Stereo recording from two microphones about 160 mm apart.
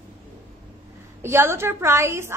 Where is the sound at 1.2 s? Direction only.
15° right (ahead or behind).